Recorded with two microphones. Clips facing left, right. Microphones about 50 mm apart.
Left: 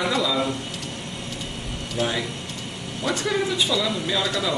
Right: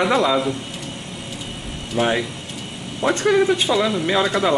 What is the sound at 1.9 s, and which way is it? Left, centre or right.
Speech, right.